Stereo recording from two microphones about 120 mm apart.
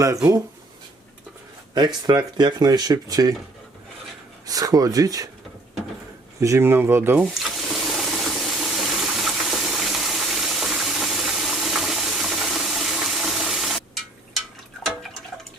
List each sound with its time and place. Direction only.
0.0 s speech: 25° right (ahead or behind)
2.0 s speech: 35° right (ahead or behind)
4.4 s speech: 30° right (ahead or behind)
6.4 s speech: 20° right (ahead or behind)
7.3 s water: centre (ahead or behind)